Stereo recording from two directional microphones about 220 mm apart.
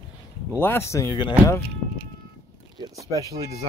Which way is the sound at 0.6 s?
10° left (ahead or behind).